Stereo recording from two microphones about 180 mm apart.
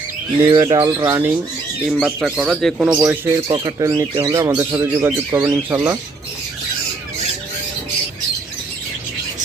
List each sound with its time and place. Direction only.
0.5 s speech: 20° right (ahead or behind); by 2.7 s centre (ahead or behind)
2.7 s speech: 10° right (ahead or behind)